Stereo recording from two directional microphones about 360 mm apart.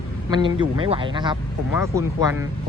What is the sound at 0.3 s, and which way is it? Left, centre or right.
Speech, centre.